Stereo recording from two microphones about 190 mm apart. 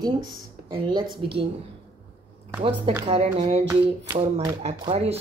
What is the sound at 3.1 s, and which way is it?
Speech, 30° right (ahead or behind).